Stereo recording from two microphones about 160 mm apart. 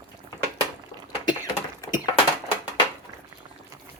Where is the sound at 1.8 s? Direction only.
25° left (ahead or behind).